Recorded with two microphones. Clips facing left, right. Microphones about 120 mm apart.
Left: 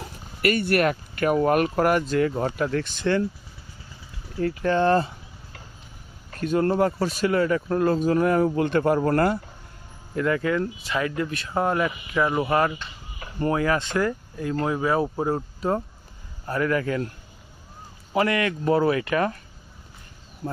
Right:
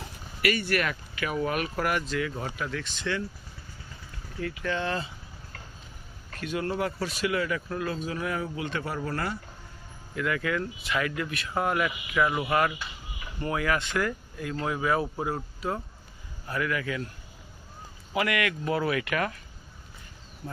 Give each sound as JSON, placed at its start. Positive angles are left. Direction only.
{"t": 0.4, "sound": "speech", "side_deg": 50}
{"t": 4.4, "sound": "speech", "side_deg": 35}
{"t": 6.4, "sound": "speech", "side_deg": 40}
{"t": 10.2, "sound": "speech", "side_deg": 35}
{"t": 16.5, "sound": "speech", "side_deg": 35}
{"t": 18.1, "sound": "speech", "side_deg": 35}